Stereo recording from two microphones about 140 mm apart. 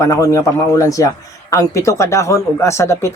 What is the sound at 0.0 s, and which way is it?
A man's voice, 20° left (ahead or behind).